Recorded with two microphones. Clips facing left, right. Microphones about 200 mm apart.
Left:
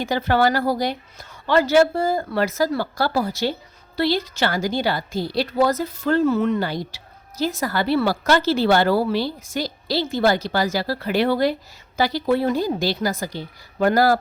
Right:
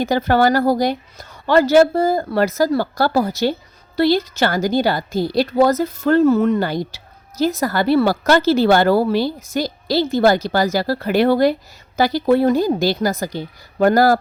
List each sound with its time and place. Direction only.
0.0 s a woman's voice: 40° right (ahead or behind)